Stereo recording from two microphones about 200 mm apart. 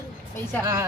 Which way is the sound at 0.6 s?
15° right (ahead or behind).